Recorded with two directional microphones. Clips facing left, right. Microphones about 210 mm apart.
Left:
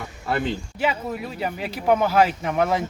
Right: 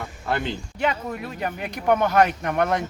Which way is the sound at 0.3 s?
Centre (ahead or behind).